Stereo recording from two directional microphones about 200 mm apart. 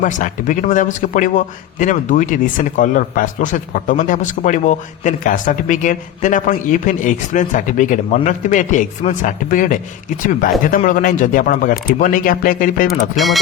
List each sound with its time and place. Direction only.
0.0 s a man's voice: 40° left (ahead or behind)
12.9 s speech: centre (ahead or behind)